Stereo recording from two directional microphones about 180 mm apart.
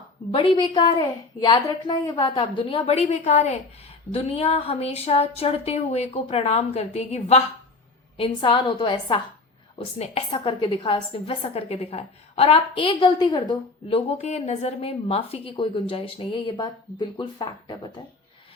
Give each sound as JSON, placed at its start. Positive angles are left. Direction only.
{"t": 0.3, "sound": "a woman's voice", "side_deg": 30}